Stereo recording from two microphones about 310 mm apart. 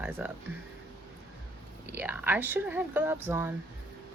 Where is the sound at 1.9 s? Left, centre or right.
Centre.